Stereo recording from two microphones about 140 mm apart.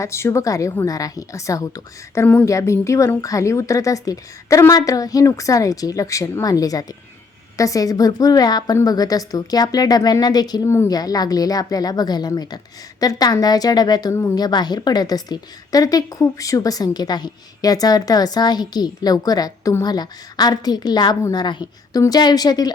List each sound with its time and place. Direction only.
0.0 s a woman's voice: 20° left (ahead or behind)